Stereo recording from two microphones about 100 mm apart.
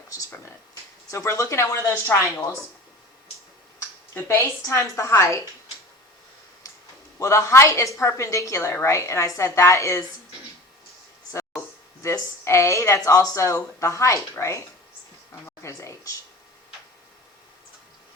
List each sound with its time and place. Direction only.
0.1 s a sound: 35° left (ahead or behind)
1.1 s speech: 30° left (ahead or behind)
4.1 s speech: 30° left (ahead or behind)
7.2 s a woman's voice: 30° left (ahead or behind)
12.0 s speech: 30° left (ahead or behind)